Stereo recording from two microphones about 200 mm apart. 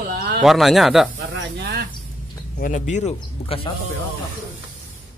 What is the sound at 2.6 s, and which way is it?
Speech, 40° left (ahead or behind).